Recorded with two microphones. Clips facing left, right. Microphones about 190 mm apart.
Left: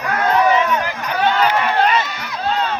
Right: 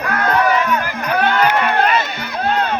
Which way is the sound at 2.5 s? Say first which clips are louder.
Right 2 dB; 55° right (ahead or behind).